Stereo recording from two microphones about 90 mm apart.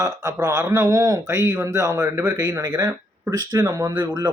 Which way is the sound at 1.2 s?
30° right (ahead or behind).